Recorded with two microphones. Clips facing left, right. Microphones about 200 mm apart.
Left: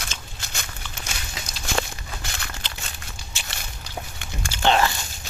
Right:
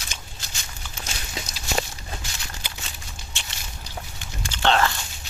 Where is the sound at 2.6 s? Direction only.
10° right (ahead or behind).